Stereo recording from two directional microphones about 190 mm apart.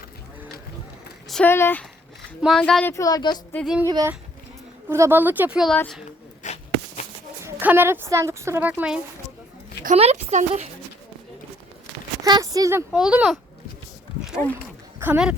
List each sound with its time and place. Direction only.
1.3 s speech: 10° left (ahead or behind)
2.9 s speech: 20° left (ahead or behind)
3.5 s speech: 5° left (ahead or behind)
3.8 s speech: 20° right (ahead or behind); by 5.7 s 5° right (ahead or behind)
5.7 s speech: 10° left (ahead or behind)
6.4 s a sound: 35° left (ahead or behind)
7.4 s speech: 10° right (ahead or behind)
9.8 s speech: 35° right (ahead or behind)
12.2 s speech: 20° right (ahead or behind)
12.9 s speech: 5° right (ahead or behind)
14.9 s speech: 10° right (ahead or behind)